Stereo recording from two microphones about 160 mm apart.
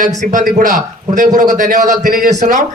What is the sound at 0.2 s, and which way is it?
A man's voice, 50° right (ahead or behind).